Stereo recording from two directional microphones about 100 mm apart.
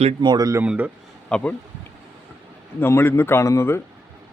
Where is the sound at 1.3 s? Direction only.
10° left (ahead or behind).